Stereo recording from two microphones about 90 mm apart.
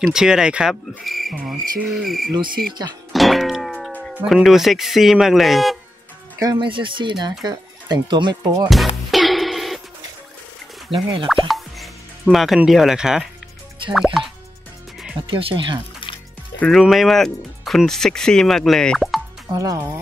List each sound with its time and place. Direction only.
0.0 s speech: 5° right (ahead or behind)
3.1 s music: centre (ahead or behind)
4.3 s speech: centre (ahead or behind)
6.6 s speech: 65° right (ahead or behind)
8.6 s music: centre (ahead or behind)
10.9 s speech: 75° right (ahead or behind)
11.4 s music: centre (ahead or behind)
12.6 s speech: 5° right (ahead or behind)
15.2 s speech: 75° right (ahead or behind)
16.7 s speech: centre (ahead or behind)
19.5 s speech: 40° right (ahead or behind)